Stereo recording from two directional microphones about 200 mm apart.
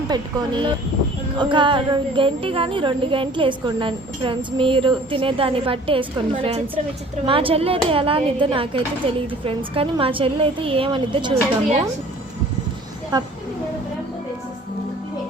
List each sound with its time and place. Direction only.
0.1 s a woman's voice: 25° right (ahead or behind)